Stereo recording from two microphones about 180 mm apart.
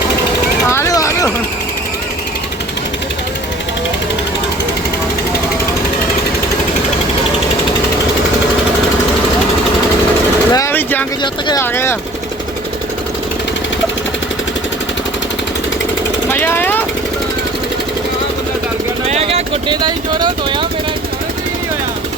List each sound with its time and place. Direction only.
0.7 s a sound: 15° left (ahead or behind)
10.5 s vehicle: 15° left (ahead or behind)
11.2 s a sound: 25° left (ahead or behind)
11.6 s vehicle: 15° left (ahead or behind)
16.3 s vehicle: 10° left (ahead or behind)
19.0 s vehicle: 35° right (ahead or behind)